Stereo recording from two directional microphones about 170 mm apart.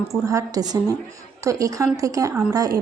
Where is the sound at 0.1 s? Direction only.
20° right (ahead or behind).